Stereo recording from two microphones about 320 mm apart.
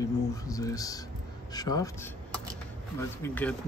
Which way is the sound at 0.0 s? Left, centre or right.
Centre.